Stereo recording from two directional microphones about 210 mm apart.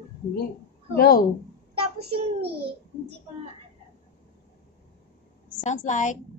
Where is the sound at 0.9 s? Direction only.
45° left (ahead or behind).